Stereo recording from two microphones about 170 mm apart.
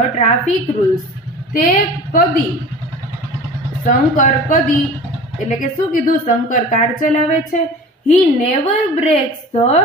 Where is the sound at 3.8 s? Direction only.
50° left (ahead or behind).